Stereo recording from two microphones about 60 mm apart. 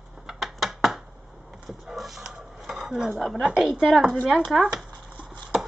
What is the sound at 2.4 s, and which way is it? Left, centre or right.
Dishes, centre.